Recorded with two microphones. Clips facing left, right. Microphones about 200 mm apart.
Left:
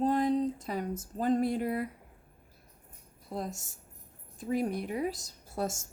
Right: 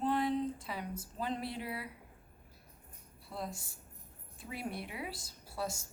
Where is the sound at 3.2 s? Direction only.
45° left (ahead or behind).